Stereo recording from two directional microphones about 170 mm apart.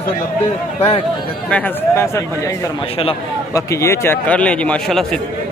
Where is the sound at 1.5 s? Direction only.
10° left (ahead or behind).